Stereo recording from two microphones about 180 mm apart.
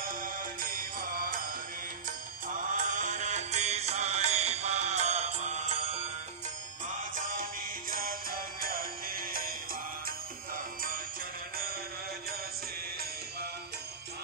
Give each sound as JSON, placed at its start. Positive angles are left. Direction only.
{"t": 0.0, "sound": "music", "side_deg": -50}
{"t": 2.4, "sound": "music", "side_deg": -45}
{"t": 6.9, "sound": "music", "side_deg": -45}